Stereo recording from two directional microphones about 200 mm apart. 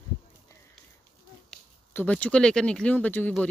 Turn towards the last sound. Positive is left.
turn(degrees=5)  # may be behind; listen again after turning